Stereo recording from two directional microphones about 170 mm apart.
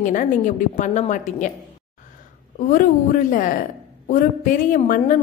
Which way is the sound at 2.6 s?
50° left (ahead or behind).